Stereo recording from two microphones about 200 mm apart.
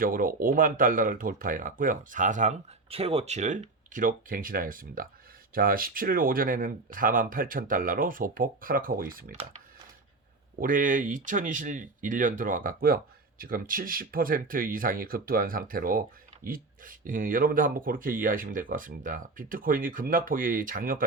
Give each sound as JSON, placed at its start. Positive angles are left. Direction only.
{"t": 0.0, "sound": "speech", "side_deg": -45}
{"t": 10.6, "sound": "speech", "side_deg": -40}